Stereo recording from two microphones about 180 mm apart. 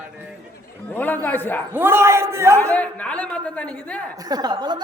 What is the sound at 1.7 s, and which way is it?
Speech, 15° right (ahead or behind).